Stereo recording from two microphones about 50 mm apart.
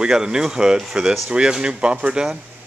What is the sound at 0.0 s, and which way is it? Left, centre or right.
A man's voice, centre.